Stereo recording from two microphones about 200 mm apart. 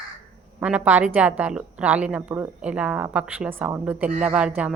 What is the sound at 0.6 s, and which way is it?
A woman's voice, 5° right (ahead or behind).